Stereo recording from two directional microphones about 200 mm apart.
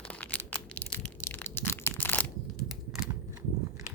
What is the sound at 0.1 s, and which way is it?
Crushing, 5° left (ahead or behind).